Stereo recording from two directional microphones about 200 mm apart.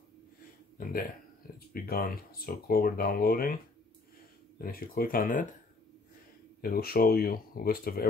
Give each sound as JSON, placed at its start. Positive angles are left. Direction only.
{"t": 1.7, "sound": "speech", "side_deg": 45}
{"t": 6.6, "sound": "speech", "side_deg": 50}